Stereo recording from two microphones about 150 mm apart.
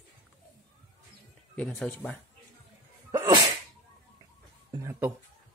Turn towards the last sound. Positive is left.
turn(degrees=-20)  # may be behind; listen again after turning